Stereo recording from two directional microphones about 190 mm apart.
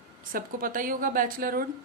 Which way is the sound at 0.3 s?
50° right (ahead or behind).